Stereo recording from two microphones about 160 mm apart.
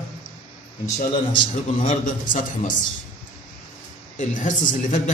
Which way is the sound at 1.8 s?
50° left (ahead or behind).